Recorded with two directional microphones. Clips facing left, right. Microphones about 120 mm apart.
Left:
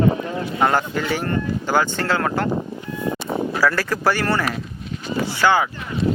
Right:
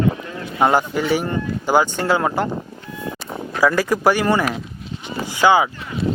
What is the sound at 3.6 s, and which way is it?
Speech, 15° right (ahead or behind).